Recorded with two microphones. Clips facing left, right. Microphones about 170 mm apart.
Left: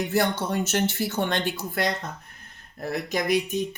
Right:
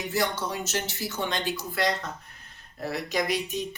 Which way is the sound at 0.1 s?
55° left (ahead or behind).